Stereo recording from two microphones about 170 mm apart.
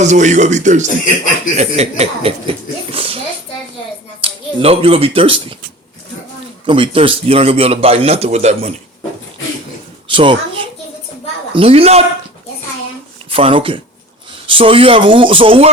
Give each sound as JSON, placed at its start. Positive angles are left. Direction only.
{"t": 0.0, "sound": "speech", "side_deg": -45}
{"t": 4.2, "sound": "a man's voice", "side_deg": -35}
{"t": 6.7, "sound": "a man's voice", "side_deg": -30}
{"t": 10.1, "sound": "a child's voice", "side_deg": -30}
{"t": 13.3, "sound": "a man's voice", "side_deg": -30}